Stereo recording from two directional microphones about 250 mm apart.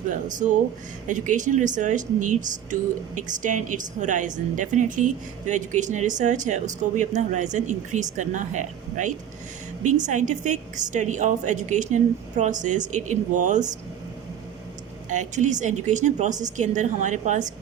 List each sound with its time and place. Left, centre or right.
0.1 s speech: right
15.1 s speech: right